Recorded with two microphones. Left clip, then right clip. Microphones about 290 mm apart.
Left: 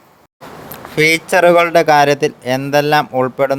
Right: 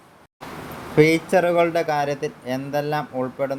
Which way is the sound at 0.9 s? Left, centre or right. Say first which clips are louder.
Left 5 dB; left.